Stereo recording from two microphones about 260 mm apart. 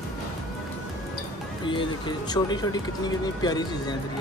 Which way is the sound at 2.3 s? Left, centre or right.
Centre.